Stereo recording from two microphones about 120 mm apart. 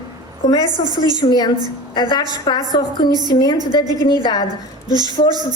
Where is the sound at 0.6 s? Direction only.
35° right (ahead or behind).